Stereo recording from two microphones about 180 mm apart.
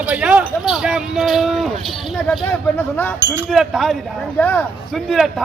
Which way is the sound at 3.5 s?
Centre (ahead or behind).